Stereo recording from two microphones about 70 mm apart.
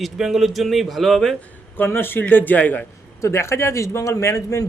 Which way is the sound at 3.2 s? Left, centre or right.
Left.